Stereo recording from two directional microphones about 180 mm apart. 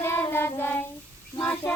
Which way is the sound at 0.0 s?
15° left (ahead or behind).